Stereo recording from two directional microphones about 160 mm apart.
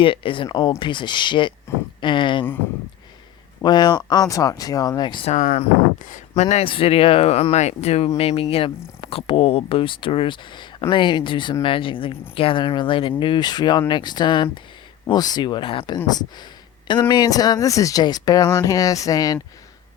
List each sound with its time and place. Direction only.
0.0 s speech: 35° left (ahead or behind)
3.6 s speech: 25° left (ahead or behind)
5.3 s speech: 50° left (ahead or behind); by 19.4 s 25° left (ahead or behind)